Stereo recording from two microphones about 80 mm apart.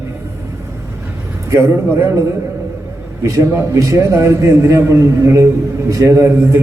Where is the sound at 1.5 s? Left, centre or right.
Right.